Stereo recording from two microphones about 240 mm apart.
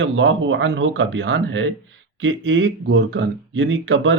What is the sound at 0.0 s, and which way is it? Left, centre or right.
Speech, right.